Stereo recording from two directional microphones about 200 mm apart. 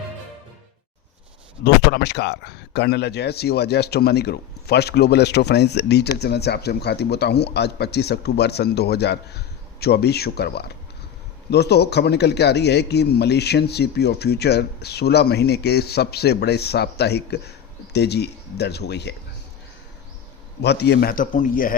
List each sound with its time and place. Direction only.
1.6 s a man's voice: 60° left (ahead or behind)
20.6 s a man's voice: 55° left (ahead or behind)